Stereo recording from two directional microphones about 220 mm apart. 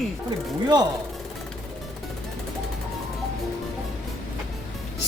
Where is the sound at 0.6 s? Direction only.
20° right (ahead or behind).